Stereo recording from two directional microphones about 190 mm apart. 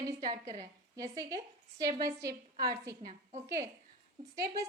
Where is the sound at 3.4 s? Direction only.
15° right (ahead or behind).